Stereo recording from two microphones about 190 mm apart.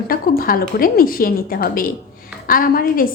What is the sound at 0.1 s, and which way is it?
A woman's voice, 50° left (ahead or behind).